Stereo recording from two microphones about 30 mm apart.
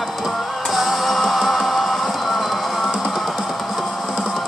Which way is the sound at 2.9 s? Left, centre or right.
Centre.